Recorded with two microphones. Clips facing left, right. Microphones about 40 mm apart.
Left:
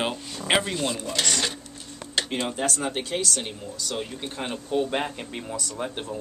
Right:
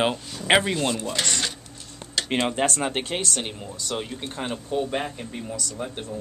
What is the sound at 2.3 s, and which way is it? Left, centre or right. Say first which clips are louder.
Speech: right 8 dB; right.